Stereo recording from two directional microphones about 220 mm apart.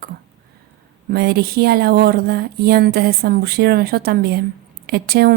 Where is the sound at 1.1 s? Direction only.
45° right (ahead or behind).